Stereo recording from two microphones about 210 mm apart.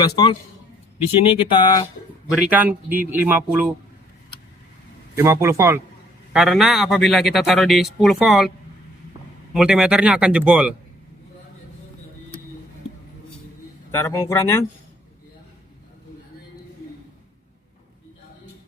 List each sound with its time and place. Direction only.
1.4 s speech: 25° left (ahead or behind)
2.3 s a man's voice: 5° right (ahead or behind)
5.1 s a man's voice: 15° right (ahead or behind)
6.3 s a man's voice: centre (ahead or behind)
13.9 s speech: 10° left (ahead or behind)